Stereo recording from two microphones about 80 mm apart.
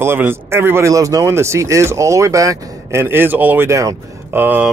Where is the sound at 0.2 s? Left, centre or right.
Right.